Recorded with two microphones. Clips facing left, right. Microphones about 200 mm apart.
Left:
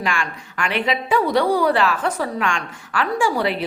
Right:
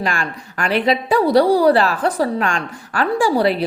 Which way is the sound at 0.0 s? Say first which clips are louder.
Right 2 dB; 40° right (ahead or behind).